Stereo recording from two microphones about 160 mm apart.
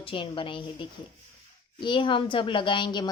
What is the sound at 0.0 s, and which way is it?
A woman's voice, 35° left (ahead or behind).